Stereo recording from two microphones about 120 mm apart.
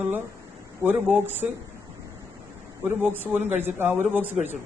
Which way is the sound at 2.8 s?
15° right (ahead or behind).